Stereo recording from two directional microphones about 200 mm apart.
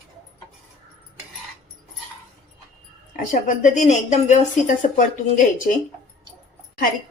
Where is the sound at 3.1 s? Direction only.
40° left (ahead or behind).